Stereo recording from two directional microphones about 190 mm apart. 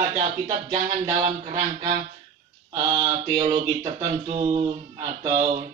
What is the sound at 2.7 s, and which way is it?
Speech, 25° right (ahead or behind).